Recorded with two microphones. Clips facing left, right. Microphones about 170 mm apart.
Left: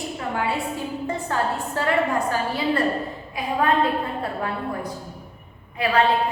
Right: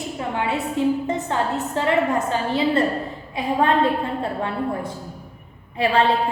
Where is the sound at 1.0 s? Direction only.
20° right (ahead or behind).